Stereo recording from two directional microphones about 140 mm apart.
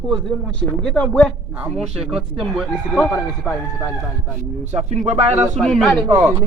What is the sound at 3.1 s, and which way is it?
Speech, 20° left (ahead or behind).